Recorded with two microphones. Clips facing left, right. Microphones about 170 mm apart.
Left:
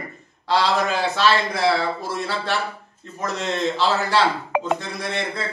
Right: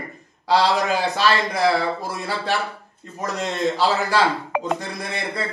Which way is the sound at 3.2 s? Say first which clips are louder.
Right 1 dB; 10° right (ahead or behind).